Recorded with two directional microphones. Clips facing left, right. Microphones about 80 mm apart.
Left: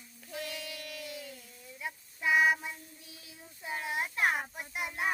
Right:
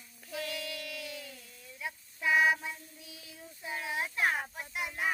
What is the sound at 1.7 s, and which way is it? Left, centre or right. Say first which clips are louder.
Child singing: even; centre.